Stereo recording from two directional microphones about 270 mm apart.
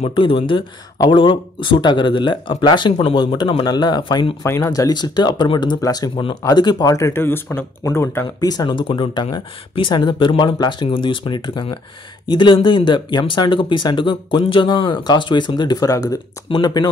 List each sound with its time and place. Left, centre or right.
0.0 s speech: centre